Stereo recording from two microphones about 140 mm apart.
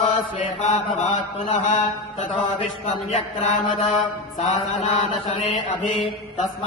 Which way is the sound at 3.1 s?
55° left (ahead or behind).